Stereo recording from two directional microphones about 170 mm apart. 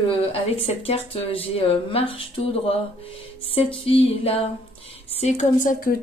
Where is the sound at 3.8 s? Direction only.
35° left (ahead or behind); by 5.9 s 50° left (ahead or behind).